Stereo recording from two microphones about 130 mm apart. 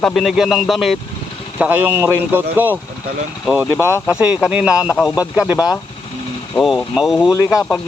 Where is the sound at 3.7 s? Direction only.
20° right (ahead or behind).